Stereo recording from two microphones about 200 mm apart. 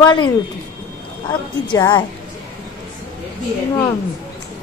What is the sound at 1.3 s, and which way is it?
Speech, 20° left (ahead or behind).